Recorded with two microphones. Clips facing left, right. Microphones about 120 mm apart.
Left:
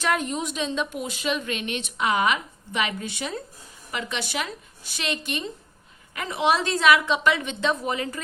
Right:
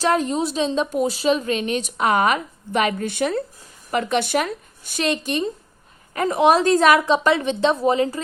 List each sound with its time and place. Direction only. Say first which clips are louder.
0.0 s a woman's voice: right 6 dB; 35° right (ahead or behind)